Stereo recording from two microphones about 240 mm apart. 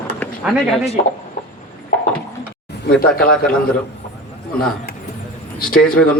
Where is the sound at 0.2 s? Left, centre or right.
Centre.